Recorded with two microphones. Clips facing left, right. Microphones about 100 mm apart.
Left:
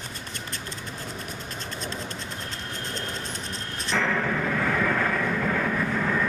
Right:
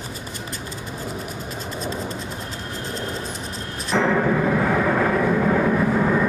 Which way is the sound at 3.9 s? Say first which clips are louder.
Right 7 dB; 20° right (ahead or behind).